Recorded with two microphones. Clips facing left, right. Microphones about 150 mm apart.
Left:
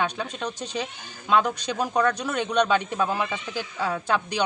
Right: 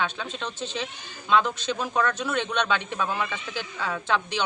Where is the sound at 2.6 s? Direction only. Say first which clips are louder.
Left 4 dB; 45° left (ahead or behind).